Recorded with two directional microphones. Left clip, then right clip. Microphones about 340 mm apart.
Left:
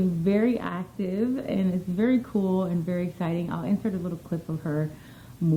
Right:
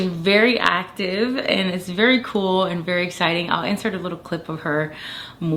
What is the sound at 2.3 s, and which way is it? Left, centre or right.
Speech, right.